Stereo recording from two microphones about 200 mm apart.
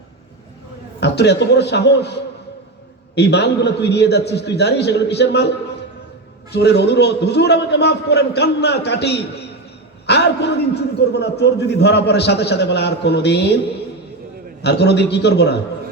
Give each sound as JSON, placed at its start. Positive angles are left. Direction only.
{"t": 0.9, "sound": "a man's voice", "side_deg": 55}
{"t": 6.5, "sound": "a man's voice", "side_deg": 55}
{"t": 14.6, "sound": "a man's voice", "side_deg": 55}